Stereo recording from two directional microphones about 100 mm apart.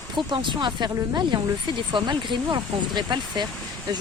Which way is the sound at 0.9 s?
40° right (ahead or behind).